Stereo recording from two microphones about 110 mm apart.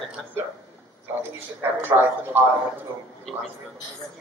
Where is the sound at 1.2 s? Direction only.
20° right (ahead or behind).